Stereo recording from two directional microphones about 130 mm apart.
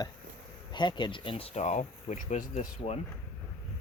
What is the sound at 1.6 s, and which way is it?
Speech, 65° left (ahead or behind).